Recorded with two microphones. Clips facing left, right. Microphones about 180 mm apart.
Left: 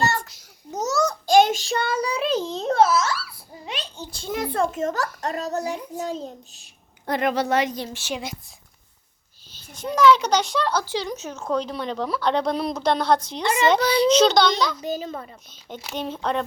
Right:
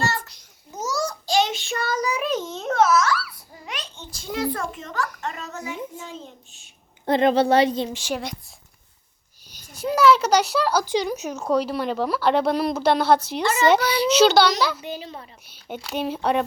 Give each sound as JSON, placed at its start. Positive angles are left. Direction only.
{"t": 1.3, "sound": "child singing", "side_deg": 50}
{"t": 1.6, "sound": "a sound", "side_deg": 30}
{"t": 4.3, "sound": "a sound", "side_deg": 20}
{"t": 4.8, "sound": "a child's voice", "side_deg": 40}
{"t": 7.0, "sound": "speech", "side_deg": -30}
{"t": 7.9, "sound": "a child's voice", "side_deg": -10}
{"t": 9.5, "sound": "a child's voice", "side_deg": -10}
{"t": 13.7, "sound": "a child's voice", "side_deg": 30}
{"t": 14.1, "sound": "a child's voice", "side_deg": -5}
{"t": 14.8, "sound": "a child's voice", "side_deg": 45}
{"t": 15.9, "sound": "a child's voice", "side_deg": -5}